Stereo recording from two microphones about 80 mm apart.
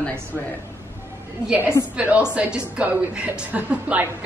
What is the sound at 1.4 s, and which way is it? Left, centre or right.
A woman's voice, centre.